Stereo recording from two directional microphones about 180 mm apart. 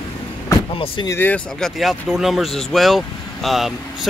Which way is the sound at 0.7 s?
30° left (ahead or behind).